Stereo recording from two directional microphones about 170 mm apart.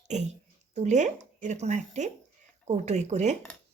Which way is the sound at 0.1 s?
40° right (ahead or behind).